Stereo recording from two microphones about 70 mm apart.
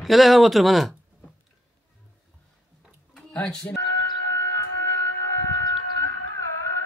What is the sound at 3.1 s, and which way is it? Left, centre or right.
Tick-tock, centre.